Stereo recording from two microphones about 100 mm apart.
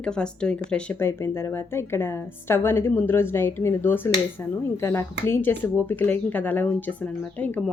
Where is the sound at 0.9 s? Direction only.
25° left (ahead or behind).